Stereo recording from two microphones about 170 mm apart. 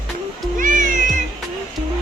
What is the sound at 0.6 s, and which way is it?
Music, 50° right (ahead or behind).